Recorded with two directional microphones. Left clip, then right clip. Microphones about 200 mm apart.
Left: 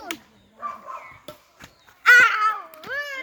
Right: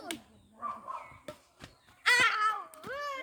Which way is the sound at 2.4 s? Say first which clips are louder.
Left 8 dB; 55° right (ahead or behind).